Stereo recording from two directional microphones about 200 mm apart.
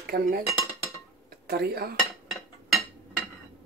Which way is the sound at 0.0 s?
50° right (ahead or behind).